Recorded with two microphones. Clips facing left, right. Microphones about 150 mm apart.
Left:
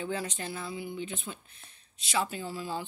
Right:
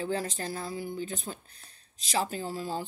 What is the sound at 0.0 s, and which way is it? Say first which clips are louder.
Speech: right 3 dB; 35° right (ahead or behind).